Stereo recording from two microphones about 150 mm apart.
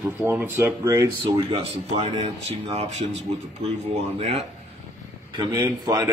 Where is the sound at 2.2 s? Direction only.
45° right (ahead or behind).